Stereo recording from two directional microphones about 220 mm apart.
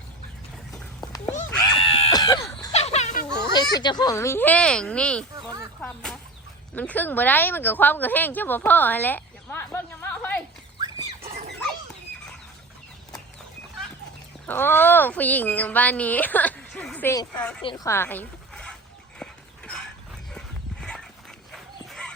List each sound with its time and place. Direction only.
0.7 s horse: 15° left (ahead or behind)
1.7 s chicken: 25° left (ahead or behind)
2.7 s a sound: 30° left (ahead or behind)
3.5 s speech: 20° left (ahead or behind)
5.8 s a sound: 5° left (ahead or behind)
6.7 s speech: 10° left (ahead or behind)
10.8 s a sound: 20° right (ahead or behind)
14.4 s speech: 10° left (ahead or behind)
19.2 s dog: 5° left (ahead or behind)
21.5 s dog: centre (ahead or behind)